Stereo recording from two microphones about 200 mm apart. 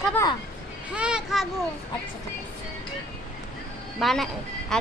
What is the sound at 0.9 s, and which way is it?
Speech, 5° right (ahead or behind).